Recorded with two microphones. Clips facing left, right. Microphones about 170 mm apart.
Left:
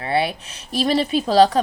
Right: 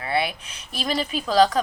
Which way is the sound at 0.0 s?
30° left (ahead or behind).